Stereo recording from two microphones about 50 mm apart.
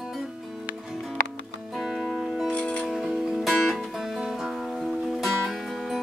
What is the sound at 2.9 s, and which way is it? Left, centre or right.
Music, centre.